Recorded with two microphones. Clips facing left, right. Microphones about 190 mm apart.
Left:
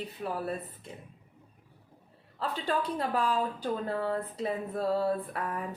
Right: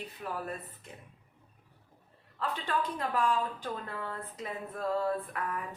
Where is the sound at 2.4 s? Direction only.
35° left (ahead or behind).